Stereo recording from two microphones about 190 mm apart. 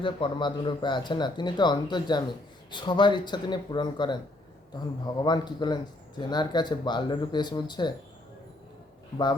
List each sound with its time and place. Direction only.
0.0 s speech: 25° left (ahead or behind)
5.2 s speech: 20° left (ahead or behind)